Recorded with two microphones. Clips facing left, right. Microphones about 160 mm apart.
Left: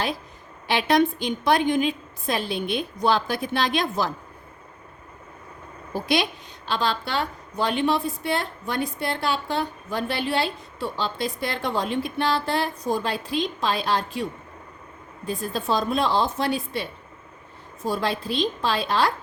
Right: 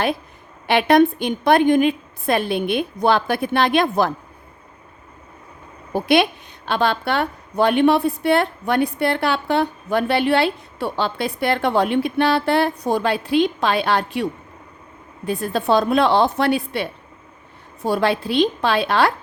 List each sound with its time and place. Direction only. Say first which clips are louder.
0.7 s a woman's voice: right 6 dB; 55° right (ahead or behind)
5.9 s a woman's voice: right 7 dB; 60° right (ahead or behind)
15.3 s a woman's voice: right 7 dB; 65° right (ahead or behind)